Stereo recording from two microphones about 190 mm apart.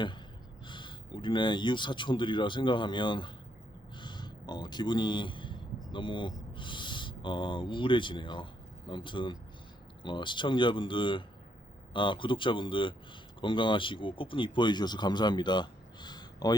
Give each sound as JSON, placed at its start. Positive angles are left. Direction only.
{"t": 0.6, "sound": "speech", "side_deg": 25}
{"t": 3.9, "sound": "a sound", "side_deg": 25}
{"t": 5.9, "sound": "speech", "side_deg": 25}